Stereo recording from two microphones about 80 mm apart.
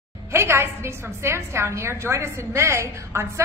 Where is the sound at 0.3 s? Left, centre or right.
Right.